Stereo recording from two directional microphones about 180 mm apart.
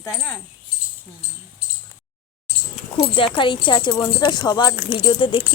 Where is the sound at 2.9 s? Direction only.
30° left (ahead or behind).